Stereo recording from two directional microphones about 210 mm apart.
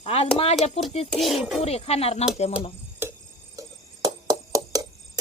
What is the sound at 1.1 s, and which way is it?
Speech, centre (ahead or behind).